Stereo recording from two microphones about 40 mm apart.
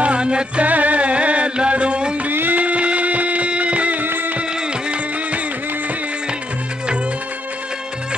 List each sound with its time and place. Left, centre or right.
0.0 s music: right
0.7 s music: right
2.3 s music: right
2.6 s music: right
4.0 s music: right